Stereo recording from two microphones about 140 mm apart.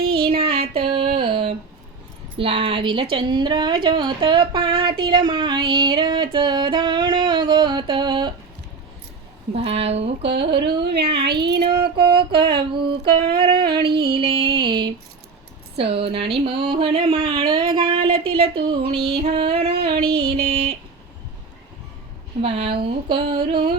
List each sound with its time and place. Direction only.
0.0 s music: 90° right
0.3 s child singing: 45° right (ahead or behind)
2.4 s a woman's voice: 40° right (ahead or behind)
9.6 s a woman's voice: 45° right (ahead or behind)
11.7 s female singing: 90° right
12.2 s a woman's voice: 35° right (ahead or behind)
14.1 s music: 40° right (ahead or behind)
15.7 s a woman's voice: 40° right (ahead or behind)
17.7 s a sound: 40° right (ahead or behind)
18.2 s a woman's voice: 40° right (ahead or behind)
18.7 s music: 45° right (ahead or behind)
20.0 s music: 90° right
22.4 s a woman's voice: 50° right (ahead or behind)